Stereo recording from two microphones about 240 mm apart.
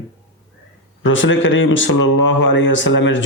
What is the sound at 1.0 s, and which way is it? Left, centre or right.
Speech, left.